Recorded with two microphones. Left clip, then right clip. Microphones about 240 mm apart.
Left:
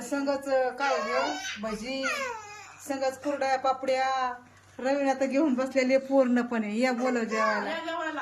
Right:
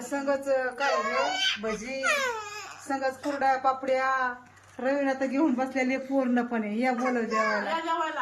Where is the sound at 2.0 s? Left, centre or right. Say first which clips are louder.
Right 5 dB; right.